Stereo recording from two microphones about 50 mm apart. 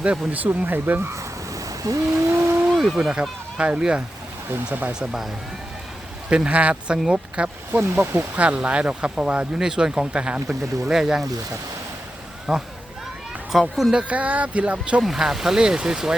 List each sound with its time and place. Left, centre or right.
0.0 s speech: right
0.4 s speech: right
2.3 s vehicle: right
2.6 s speech: centre
3.2 s speech: right
4.5 s speech: right
4.9 s speech: centre
6.3 s speech: right
7.7 s speech: right
8.4 s speech: right
10.5 s speech: centre
12.5 s speech: centre
14.1 s speech: right
15.0 s speech: centre